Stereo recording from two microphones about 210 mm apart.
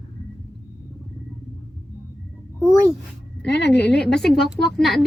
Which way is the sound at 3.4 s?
55° left (ahead or behind).